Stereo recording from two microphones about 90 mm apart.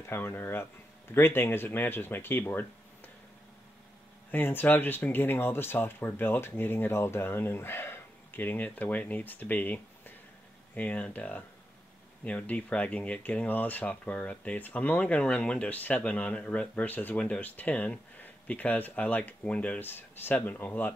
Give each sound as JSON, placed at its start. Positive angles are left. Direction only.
{"t": 0.0, "sound": "speech", "side_deg": 25}
{"t": 4.3, "sound": "speech", "side_deg": 20}